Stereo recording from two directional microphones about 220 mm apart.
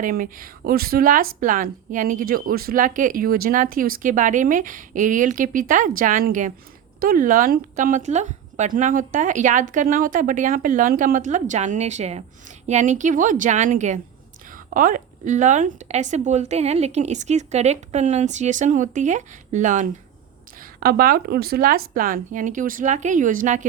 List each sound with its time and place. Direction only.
0.0 s speech: 40° right (ahead or behind)